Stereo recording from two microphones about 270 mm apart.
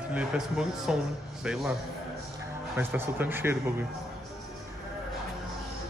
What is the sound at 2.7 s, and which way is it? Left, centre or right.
Speech, centre.